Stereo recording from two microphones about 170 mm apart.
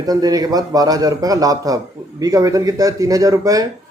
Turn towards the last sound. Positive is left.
turn(degrees=-20)  # may be behind; listen again after turning